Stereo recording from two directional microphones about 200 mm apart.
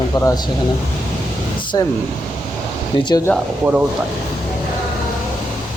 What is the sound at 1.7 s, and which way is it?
Speech, 20° left (ahead or behind).